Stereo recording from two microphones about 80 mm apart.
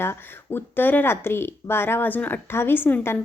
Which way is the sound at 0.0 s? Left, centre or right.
Left.